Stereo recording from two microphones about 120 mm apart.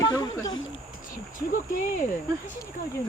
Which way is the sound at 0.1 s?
30° left (ahead or behind).